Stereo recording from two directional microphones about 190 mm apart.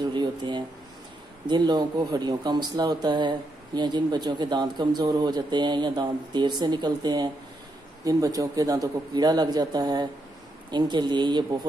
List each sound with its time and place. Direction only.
0.0 s speech: 25° right (ahead or behind)